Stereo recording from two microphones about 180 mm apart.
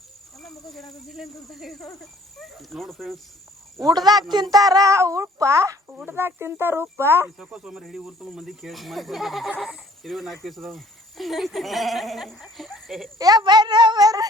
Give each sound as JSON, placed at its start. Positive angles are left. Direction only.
{"t": 0.4, "sound": "speech", "side_deg": 0}
{"t": 3.8, "sound": "speech", "side_deg": -20}
{"t": 13.1, "sound": "speech", "side_deg": -20}